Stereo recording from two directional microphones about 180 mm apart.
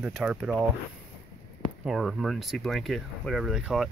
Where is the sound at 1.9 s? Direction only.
5° right (ahead or behind).